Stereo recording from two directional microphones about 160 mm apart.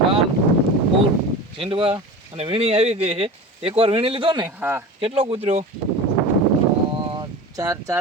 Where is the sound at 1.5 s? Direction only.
35° right (ahead or behind).